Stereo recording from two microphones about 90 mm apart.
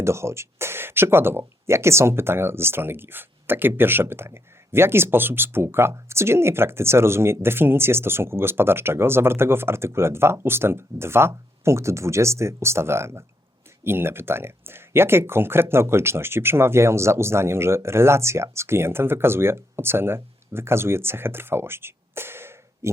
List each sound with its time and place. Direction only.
0.0 s speech: 30° right (ahead or behind)